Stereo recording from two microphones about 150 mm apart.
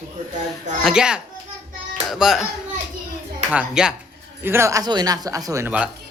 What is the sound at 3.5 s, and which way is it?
Speech, 5° right (ahead or behind).